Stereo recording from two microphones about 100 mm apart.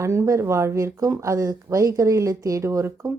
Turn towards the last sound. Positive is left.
turn(degrees=-30)  # may be behind; listen again after turning